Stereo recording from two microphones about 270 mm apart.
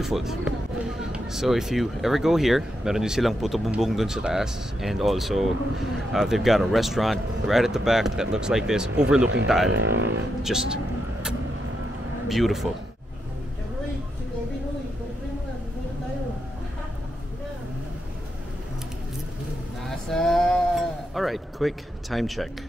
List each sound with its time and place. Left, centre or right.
0.0 s speech: centre
9.7 s speech: right
10.4 s speech: centre
12.3 s speech: centre
19.9 s sheep: centre